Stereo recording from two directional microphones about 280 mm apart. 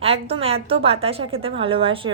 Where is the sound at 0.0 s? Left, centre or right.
Right.